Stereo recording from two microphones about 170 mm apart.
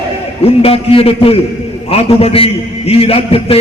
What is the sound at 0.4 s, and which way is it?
A man's voice, 35° left (ahead or behind).